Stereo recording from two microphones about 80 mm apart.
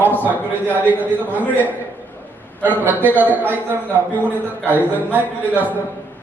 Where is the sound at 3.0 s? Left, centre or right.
Right.